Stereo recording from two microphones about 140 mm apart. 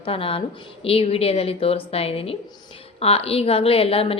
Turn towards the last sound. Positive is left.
turn(degrees=40)  # may be behind; listen again after turning